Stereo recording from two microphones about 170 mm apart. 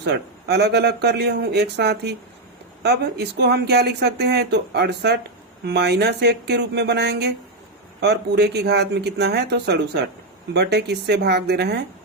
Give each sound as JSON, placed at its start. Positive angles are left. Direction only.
{"t": 0.0, "sound": "speech", "side_deg": -75}